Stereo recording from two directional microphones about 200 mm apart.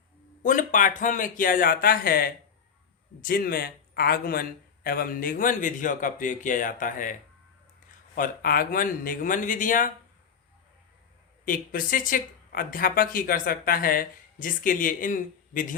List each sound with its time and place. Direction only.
0.4 s speech: 40° left (ahead or behind)
11.4 s speech: 45° left (ahead or behind)